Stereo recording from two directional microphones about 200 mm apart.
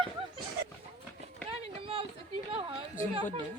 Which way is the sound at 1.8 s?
25° right (ahead or behind).